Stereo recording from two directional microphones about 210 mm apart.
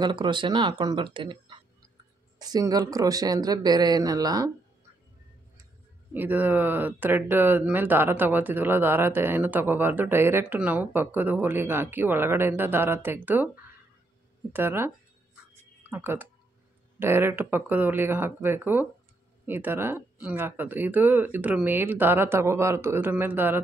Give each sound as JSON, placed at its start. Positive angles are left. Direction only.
{"t": 0.0, "sound": "speech", "side_deg": -20}
{"t": 6.1, "sound": "speech", "side_deg": -10}
{"t": 14.5, "sound": "speech", "side_deg": -10}
{"t": 15.9, "sound": "speech", "side_deg": -10}